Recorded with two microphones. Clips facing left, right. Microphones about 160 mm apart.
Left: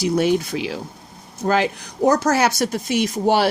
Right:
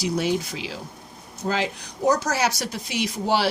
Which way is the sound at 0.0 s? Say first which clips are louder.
Left 6 dB; 55° left (ahead or behind).